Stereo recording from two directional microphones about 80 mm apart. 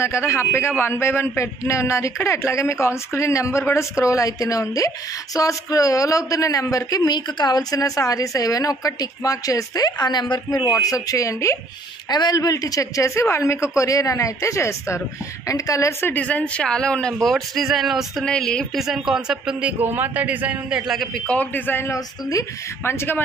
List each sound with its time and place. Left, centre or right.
0.3 s a man's voice: left
10.5 s a woman's voice: left
12.1 s a woman's voice: left
16.0 s a woman's voice: left; by 18.2 s centre
18.2 s speech: centre
18.8 s speech: centre
19.8 s a man's voice: right
20.7 s a man's voice: centre
21.4 s a woman's voice: left
21.9 s a woman's voice: left
22.8 s a woman's voice: left